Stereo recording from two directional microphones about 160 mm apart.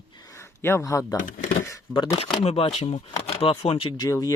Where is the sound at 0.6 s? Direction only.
15° left (ahead or behind).